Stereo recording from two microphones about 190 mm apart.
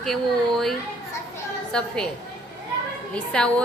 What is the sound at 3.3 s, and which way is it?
Speech, 5° left (ahead or behind).